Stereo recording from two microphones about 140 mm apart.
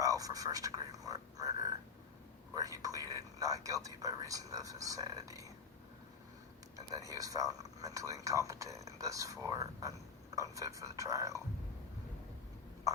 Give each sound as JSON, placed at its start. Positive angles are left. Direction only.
{"t": 0.0, "sound": "speech", "side_deg": -25}
{"t": 6.7, "sound": "speech", "side_deg": -25}